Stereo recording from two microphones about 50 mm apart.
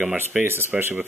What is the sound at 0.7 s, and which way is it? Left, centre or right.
Speech, right.